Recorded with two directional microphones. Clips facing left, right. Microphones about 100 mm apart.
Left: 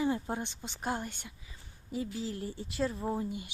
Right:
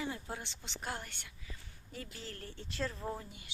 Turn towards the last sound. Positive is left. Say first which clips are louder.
# left 8 dB
turn(degrees=15)  # may be behind; listen again after turning